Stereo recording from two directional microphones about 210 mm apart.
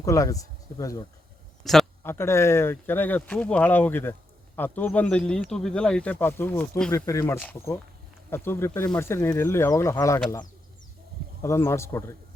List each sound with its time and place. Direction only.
0.0 s speech: 15° left (ahead or behind)
1.6 s a sound: centre (ahead or behind)
2.1 s speech: 10° left (ahead or behind)
11.4 s speech: 10° left (ahead or behind)